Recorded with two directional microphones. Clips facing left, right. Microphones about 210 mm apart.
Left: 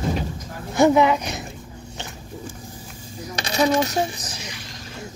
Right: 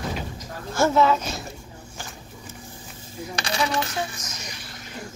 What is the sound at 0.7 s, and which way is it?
Speech, 15° left (ahead or behind).